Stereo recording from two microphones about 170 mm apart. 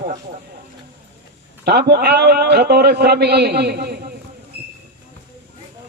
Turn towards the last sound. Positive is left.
turn(degrees=-70)  # may be behind; listen again after turning